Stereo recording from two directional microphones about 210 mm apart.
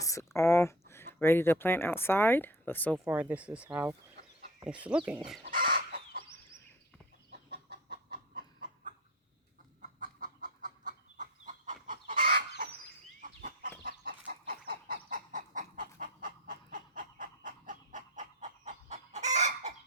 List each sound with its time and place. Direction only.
0.0 s speech: 15° left (ahead or behind)
3.1 s speech: 5° right (ahead or behind)
5.4 s chicken: 45° right (ahead or behind)
7.3 s chicken: 50° right (ahead or behind); by 19.7 s 35° right (ahead or behind)